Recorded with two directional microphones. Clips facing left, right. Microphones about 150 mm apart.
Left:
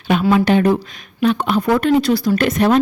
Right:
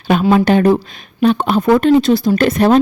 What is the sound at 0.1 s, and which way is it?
Speech, 40° right (ahead or behind).